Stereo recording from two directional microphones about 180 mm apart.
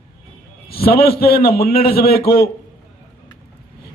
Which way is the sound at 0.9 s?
60° left (ahead or behind).